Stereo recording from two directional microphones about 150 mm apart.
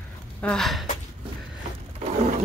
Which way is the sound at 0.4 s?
5° left (ahead or behind).